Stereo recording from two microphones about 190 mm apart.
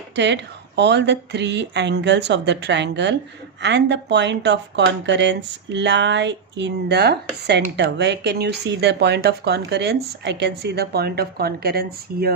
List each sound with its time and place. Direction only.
0.2 s speech: 65° right (ahead or behind)